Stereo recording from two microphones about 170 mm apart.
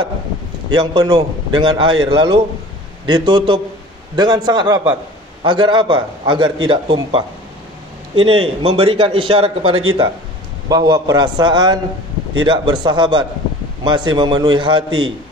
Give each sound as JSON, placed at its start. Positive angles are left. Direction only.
{"t": 0.7, "sound": "a man's voice", "side_deg": -25}